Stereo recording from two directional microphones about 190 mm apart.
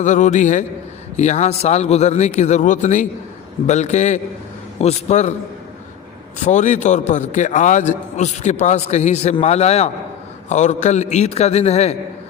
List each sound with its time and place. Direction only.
0.0 s a man's voice: 40° left (ahead or behind)
6.4 s a man's voice: 40° left (ahead or behind)